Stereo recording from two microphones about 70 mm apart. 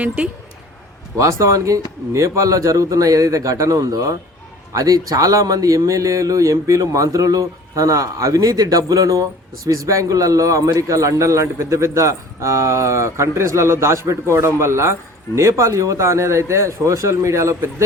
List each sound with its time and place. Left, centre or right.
1.2 s a man's voice: right